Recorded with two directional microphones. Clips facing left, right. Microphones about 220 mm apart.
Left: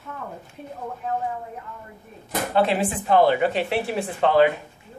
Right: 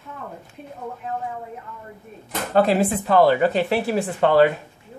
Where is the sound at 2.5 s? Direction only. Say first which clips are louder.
Right 4 dB; 40° right (ahead or behind).